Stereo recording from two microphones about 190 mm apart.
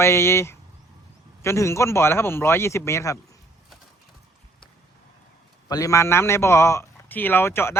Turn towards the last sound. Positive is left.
turn(degrees=15)  # may be behind; listen again after turning